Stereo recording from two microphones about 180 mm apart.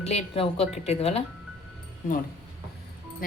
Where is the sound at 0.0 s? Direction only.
35° left (ahead or behind).